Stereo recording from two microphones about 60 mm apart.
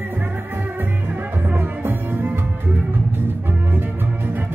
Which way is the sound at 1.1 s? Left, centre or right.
Right.